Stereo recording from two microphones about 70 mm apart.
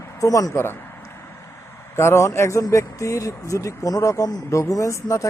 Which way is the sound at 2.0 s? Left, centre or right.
Left.